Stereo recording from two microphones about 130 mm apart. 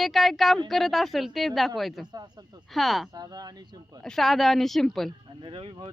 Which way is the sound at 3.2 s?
30° right (ahead or behind).